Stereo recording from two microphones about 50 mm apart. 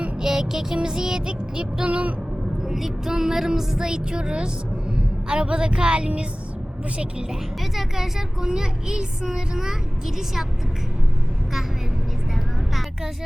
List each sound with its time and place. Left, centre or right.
0.2 s speech: centre; by 2.1 s right
2.6 s a woman's voice: centre
7.6 s speech: centre